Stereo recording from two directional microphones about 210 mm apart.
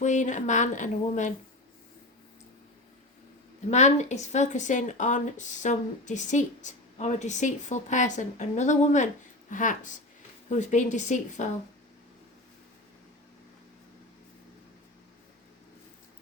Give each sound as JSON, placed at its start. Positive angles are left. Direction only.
{"t": 0.0, "sound": "speech", "side_deg": 35}
{"t": 3.7, "sound": "speech", "side_deg": 35}